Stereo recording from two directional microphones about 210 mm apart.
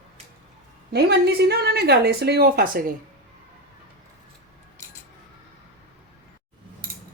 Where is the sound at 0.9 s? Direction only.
50° right (ahead or behind).